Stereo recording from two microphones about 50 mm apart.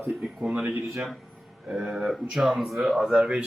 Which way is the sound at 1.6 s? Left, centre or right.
Centre.